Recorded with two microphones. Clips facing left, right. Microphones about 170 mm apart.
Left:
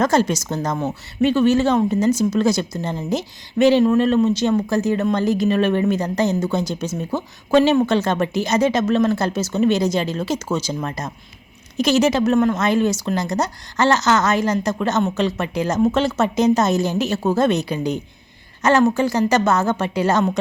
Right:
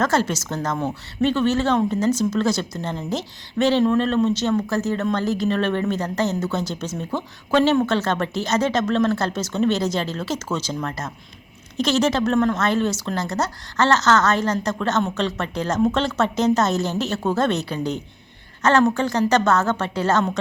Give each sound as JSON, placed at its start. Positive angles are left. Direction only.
{"t": 0.0, "sound": "speech", "side_deg": 15}